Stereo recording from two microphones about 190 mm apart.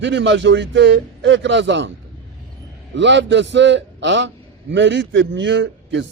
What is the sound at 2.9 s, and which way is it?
A man's voice, 70° right (ahead or behind).